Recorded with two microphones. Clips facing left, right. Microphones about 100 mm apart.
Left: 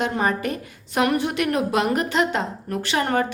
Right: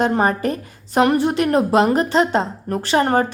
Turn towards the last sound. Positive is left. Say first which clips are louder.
# right 5 dB
turn(degrees=-35)  # may be behind; listen again after turning